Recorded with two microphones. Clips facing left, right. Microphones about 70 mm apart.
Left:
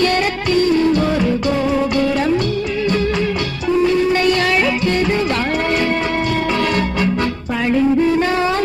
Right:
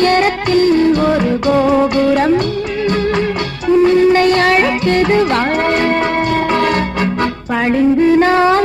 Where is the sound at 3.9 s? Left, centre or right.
Right.